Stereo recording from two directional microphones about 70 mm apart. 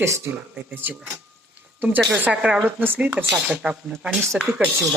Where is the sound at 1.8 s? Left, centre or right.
Right.